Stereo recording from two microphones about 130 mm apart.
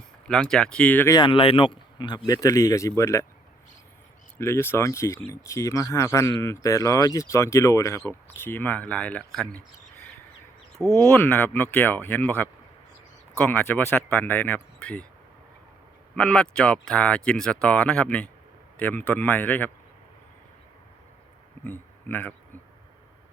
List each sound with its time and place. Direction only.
0.3 s speech: 5° left (ahead or behind)
1.0 s speech: 35° left (ahead or behind)
4.4 s speech: 20° left (ahead or behind)
11.0 s speech: 15° left (ahead or behind)
16.1 s speech: 5° left (ahead or behind)
21.6 s a sound: 15° left (ahead or behind)